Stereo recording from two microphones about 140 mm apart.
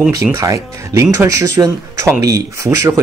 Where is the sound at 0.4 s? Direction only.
20° right (ahead or behind).